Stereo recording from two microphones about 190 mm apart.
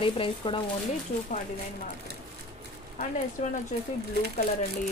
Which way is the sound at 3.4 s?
35° left (ahead or behind).